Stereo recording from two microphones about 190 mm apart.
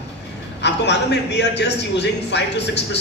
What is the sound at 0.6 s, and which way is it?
Speech, 65° left (ahead or behind).